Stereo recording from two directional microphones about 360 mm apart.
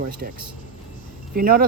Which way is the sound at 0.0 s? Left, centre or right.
Right.